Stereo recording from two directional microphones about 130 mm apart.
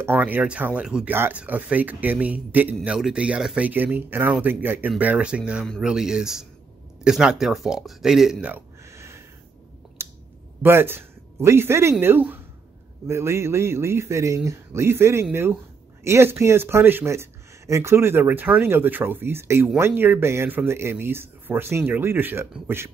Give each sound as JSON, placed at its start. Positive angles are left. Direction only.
{"t": 0.0, "sound": "a man's voice", "side_deg": -15}
{"t": 10.0, "sound": "a sound", "side_deg": -20}
{"t": 10.6, "sound": "a man's voice", "side_deg": -15}